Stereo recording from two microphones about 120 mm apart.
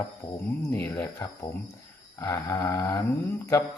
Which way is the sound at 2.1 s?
30° left (ahead or behind).